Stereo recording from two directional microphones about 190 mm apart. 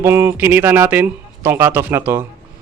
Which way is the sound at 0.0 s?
10° right (ahead or behind).